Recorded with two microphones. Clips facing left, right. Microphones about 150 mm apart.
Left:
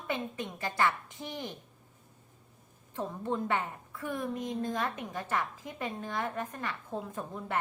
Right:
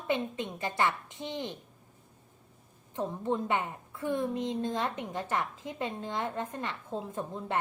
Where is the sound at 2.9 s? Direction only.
20° right (ahead or behind).